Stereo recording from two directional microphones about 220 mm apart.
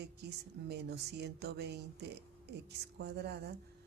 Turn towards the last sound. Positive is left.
turn(degrees=-50)  # may be behind; listen again after turning